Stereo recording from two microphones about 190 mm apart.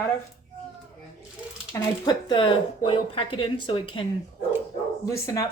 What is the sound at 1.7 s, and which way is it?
Speech, 20° left (ahead or behind).